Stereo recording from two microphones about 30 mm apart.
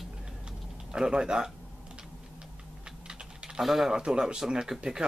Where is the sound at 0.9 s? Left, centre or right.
Right.